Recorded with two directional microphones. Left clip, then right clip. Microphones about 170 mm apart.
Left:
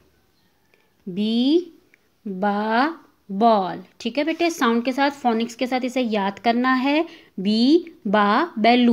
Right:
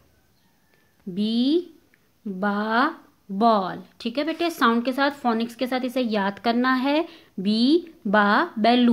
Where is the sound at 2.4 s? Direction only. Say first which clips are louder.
Left 2 dB; 15° left (ahead or behind).